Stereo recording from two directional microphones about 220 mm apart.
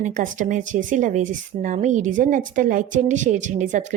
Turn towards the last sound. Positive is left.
turn(degrees=-35)  # may be behind; listen again after turning